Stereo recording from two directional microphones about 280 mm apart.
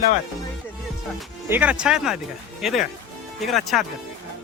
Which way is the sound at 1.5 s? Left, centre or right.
Centre.